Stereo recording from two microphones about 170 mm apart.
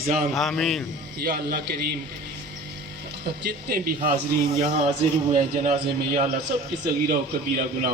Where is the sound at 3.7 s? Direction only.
65° right (ahead or behind).